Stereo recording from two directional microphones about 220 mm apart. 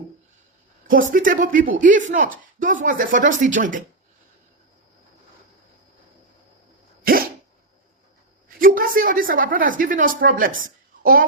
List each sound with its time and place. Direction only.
1.1 s a woman's voice: 40° right (ahead or behind)
7.0 s dog: 40° right (ahead or behind)
8.5 s a woman's voice: 40° right (ahead or behind)